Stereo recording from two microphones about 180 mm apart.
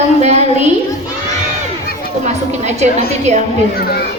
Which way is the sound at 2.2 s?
40° right (ahead or behind).